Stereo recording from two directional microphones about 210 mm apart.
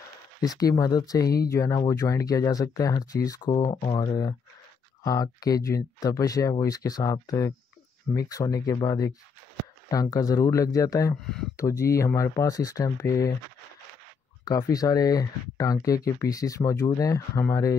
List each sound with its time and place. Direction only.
0.4 s speech: 15° left (ahead or behind)
14.4 s speech: 20° left (ahead or behind)